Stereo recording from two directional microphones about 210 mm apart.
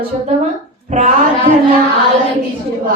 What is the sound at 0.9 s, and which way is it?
Speech, 35° right (ahead or behind).